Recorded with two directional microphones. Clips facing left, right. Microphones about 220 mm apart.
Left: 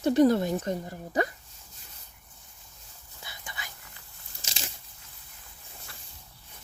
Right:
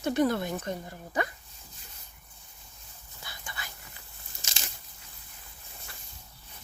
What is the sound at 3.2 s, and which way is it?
Whispering, 20° left (ahead or behind).